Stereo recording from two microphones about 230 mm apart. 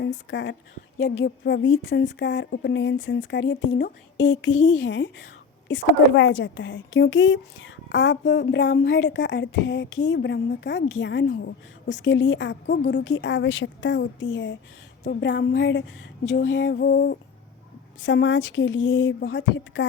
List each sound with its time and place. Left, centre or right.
0.3 s a woman's voice: left